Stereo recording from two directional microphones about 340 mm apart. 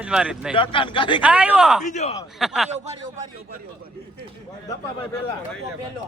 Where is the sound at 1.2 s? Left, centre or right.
Centre.